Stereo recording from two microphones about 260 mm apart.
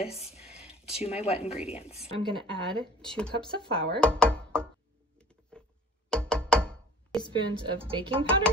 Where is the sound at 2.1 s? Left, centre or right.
Centre.